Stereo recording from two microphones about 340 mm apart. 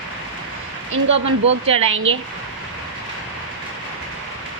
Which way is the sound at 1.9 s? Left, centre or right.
Right.